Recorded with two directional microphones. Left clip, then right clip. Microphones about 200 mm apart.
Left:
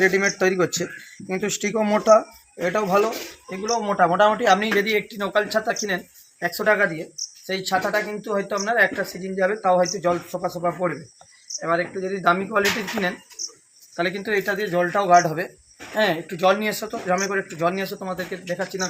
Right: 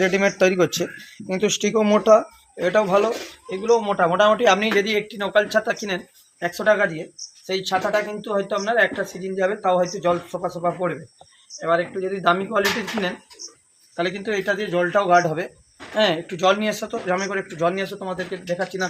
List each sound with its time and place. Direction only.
0.0 s speech: 45° right (ahead or behind); by 5.7 s 15° right (ahead or behind)
6.4 s speech: centre (ahead or behind)